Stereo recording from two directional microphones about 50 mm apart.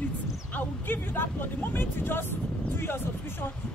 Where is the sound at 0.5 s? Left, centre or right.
Left.